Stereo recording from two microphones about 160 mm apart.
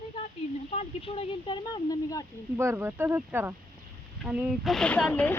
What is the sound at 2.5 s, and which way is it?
Speech, 15° right (ahead or behind).